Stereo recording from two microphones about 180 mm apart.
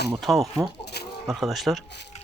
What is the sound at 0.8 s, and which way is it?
Chicken, 65° left (ahead or behind).